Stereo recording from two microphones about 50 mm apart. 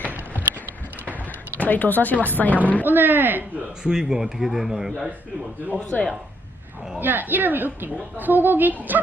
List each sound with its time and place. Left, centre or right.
1.5 s speech: left
2.8 s a woman's voice: right
3.8 s speech: centre
5.9 s speech: left
7.0 s a woman's voice: right